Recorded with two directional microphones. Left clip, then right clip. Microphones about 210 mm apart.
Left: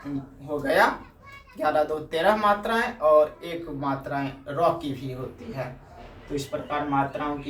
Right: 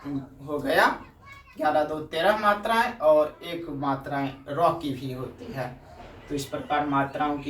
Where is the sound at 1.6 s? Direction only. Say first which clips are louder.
Left 1 dB; 15° left (ahead or behind).